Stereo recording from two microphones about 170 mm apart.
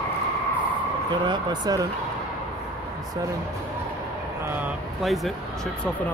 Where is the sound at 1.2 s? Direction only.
25° right (ahead or behind).